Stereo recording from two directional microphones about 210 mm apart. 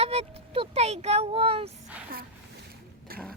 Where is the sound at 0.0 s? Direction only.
30° right (ahead or behind).